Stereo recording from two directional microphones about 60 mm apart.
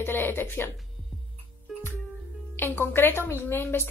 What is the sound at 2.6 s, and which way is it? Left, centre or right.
A woman's voice, left.